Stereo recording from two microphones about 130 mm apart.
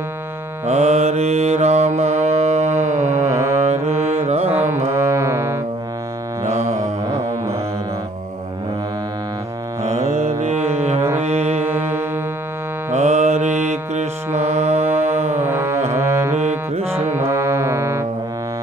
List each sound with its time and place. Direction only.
0.7 s mantra: 60° right (ahead or behind)
3.3 s music: 20° right (ahead or behind)
3.6 s music: 55° right (ahead or behind)
4.6 s music: 20° right (ahead or behind)
9.8 s mantra: 50° right (ahead or behind)
11.2 s music: 55° right (ahead or behind)
11.6 s music: 15° right (ahead or behind)
12.9 s mantra: 60° right (ahead or behind)
14.9 s music: 15° right (ahead or behind)
15.1 s music: 60° right (ahead or behind)
15.4 s music: 20° right (ahead or behind)
16.3 s music: 55° right (ahead or behind)
16.9 s music: 20° right (ahead or behind)